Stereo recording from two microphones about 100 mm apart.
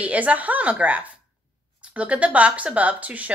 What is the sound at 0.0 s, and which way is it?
Speech, 15° right (ahead or behind).